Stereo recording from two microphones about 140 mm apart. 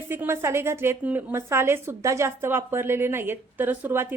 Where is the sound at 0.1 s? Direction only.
15° right (ahead or behind).